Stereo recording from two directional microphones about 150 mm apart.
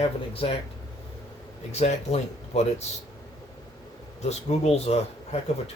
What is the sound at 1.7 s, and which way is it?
Speech, 50° left (ahead or behind).